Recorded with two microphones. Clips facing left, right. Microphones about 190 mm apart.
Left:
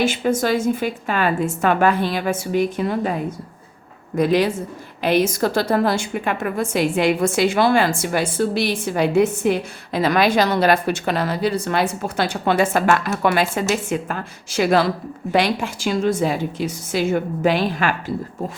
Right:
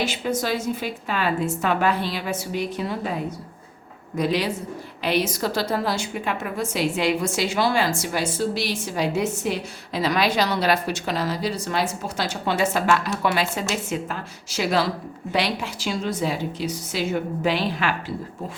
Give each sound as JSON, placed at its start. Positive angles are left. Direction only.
{"t": 0.0, "sound": "a woman's voice", "side_deg": 50}
{"t": 4.2, "sound": "a woman's voice", "side_deg": 50}